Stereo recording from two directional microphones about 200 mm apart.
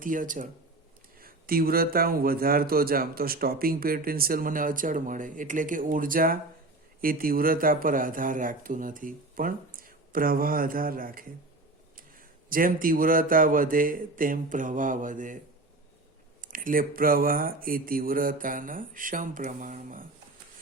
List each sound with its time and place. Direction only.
0.0 s a man's voice: 40° right (ahead or behind)
12.5 s a man's voice: 45° right (ahead or behind)
16.4 s a man's voice: 45° right (ahead or behind)